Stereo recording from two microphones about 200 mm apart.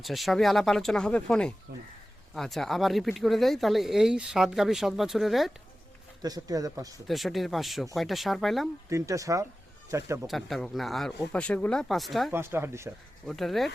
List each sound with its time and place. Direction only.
0.0 s speech: centre (ahead or behind)
6.2 s speech: 20° right (ahead or behind)
7.1 s speech: centre (ahead or behind)
8.9 s speech: 15° right (ahead or behind)
10.2 s speech: centre (ahead or behind)
12.3 s speech: 10° right (ahead or behind)
13.2 s speech: centre (ahead or behind)